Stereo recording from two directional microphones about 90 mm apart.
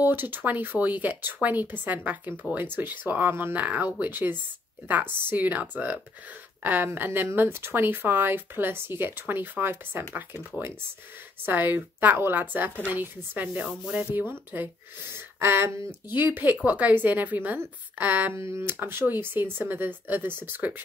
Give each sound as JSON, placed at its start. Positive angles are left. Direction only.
{"t": 0.0, "sound": "speech", "side_deg": -20}
{"t": 11.4, "sound": "speech", "side_deg": -20}
{"t": 18.4, "sound": "speech", "side_deg": -30}